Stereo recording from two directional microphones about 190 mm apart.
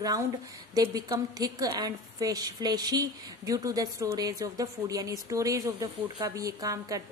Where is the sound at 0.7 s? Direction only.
20° right (ahead or behind).